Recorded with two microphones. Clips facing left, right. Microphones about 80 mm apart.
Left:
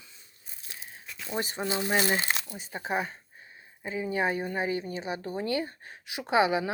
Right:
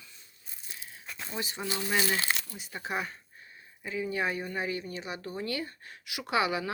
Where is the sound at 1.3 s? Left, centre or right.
Left.